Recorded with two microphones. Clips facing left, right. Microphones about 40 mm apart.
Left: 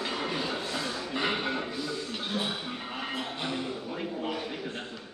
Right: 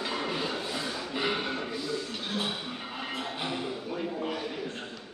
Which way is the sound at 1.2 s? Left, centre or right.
Centre.